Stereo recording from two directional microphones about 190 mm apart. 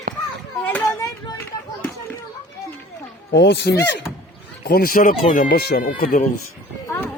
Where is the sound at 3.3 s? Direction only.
65° left (ahead or behind).